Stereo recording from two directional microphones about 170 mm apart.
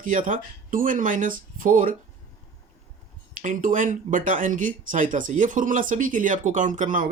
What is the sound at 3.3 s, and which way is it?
Speech, 50° right (ahead or behind).